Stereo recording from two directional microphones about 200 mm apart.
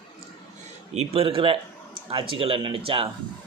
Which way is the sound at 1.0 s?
30° right (ahead or behind).